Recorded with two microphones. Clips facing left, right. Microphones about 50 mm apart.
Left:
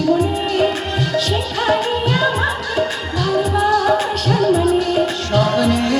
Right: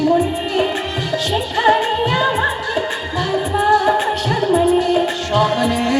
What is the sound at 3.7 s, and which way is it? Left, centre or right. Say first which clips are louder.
Music: right 5 dB; centre.